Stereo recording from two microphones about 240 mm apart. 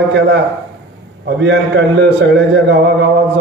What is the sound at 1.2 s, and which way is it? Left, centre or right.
A man's voice, right.